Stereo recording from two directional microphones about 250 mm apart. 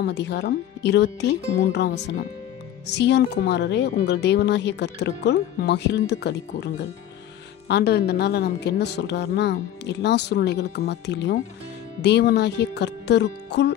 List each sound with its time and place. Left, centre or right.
0.0 s a woman's voice: left